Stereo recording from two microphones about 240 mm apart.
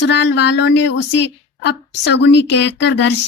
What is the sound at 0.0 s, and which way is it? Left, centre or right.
Speech, left.